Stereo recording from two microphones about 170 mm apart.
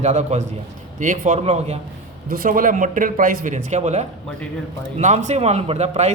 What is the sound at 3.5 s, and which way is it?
A man's voice, 40° right (ahead or behind).